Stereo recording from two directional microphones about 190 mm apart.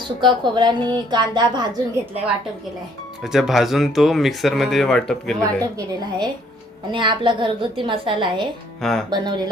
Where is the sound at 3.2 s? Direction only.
Centre (ahead or behind).